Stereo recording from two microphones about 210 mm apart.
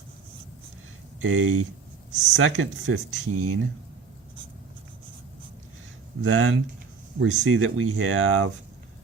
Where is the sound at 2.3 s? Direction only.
65° right (ahead or behind).